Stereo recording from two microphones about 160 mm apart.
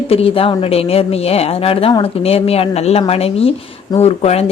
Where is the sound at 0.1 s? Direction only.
35° left (ahead or behind).